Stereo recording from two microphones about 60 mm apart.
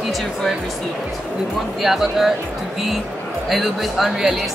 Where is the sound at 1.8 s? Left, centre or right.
Centre.